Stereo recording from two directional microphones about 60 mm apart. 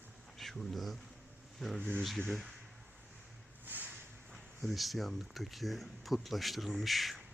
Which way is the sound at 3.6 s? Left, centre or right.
Right.